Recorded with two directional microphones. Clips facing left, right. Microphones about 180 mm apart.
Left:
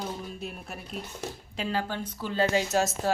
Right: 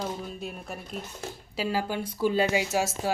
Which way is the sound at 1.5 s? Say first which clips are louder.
Right 2 dB; 10° right (ahead or behind).